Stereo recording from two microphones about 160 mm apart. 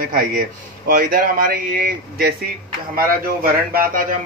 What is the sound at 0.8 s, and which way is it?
Speech, 65° right (ahead or behind).